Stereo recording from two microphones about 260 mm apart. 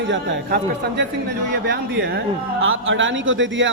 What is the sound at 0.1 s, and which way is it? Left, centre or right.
A man's voice, right.